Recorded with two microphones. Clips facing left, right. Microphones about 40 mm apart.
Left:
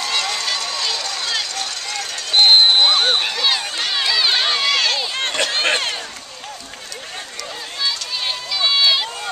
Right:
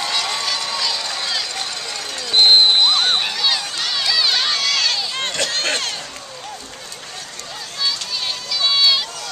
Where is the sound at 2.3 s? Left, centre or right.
Centre.